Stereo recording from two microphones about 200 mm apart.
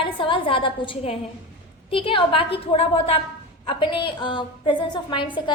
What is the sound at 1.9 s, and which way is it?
A woman's voice, 25° left (ahead or behind).